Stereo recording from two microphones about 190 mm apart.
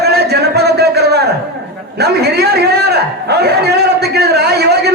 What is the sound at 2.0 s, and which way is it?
A man's voice, 60° right (ahead or behind).